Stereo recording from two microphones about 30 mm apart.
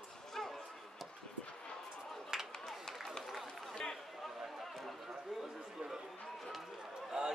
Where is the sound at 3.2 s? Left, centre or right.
Centre.